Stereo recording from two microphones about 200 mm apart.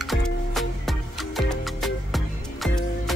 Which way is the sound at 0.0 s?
Centre (ahead or behind).